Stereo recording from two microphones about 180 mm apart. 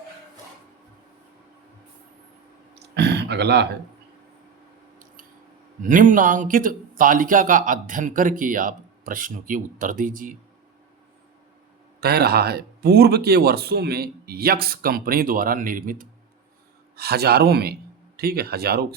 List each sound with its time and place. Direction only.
2.7 s a sound: 70° right (ahead or behind)
5.8 s speech: 45° right (ahead or behind)
11.9 s speech: 60° right (ahead or behind)